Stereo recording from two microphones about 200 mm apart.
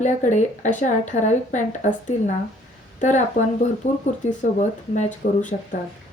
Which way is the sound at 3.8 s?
35° left (ahead or behind).